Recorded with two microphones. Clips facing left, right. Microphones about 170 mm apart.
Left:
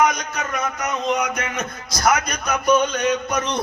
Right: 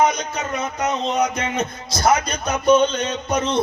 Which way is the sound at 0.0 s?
25° right (ahead or behind).